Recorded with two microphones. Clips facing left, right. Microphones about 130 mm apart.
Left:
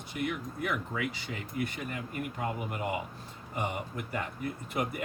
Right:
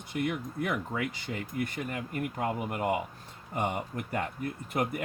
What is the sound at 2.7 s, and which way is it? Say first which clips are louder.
Speech: right 4 dB; 50° right (ahead or behind).